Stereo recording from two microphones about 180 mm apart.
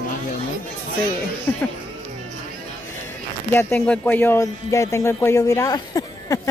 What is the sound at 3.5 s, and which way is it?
Speech, 10° left (ahead or behind).